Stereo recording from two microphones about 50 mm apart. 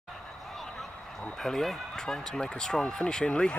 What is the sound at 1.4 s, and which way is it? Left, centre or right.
Speech, centre.